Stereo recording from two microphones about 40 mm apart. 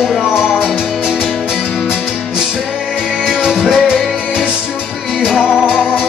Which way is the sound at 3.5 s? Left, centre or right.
Centre.